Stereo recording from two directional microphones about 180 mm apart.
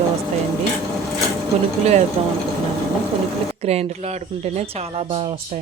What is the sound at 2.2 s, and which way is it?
Speech, 35° right (ahead or behind).